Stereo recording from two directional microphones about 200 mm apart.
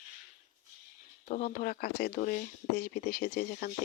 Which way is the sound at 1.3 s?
45° left (ahead or behind).